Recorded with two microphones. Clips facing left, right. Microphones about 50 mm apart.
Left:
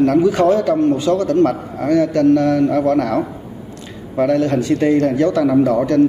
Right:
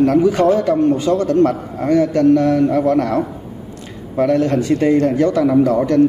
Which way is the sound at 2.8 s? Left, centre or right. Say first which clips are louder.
Even; left.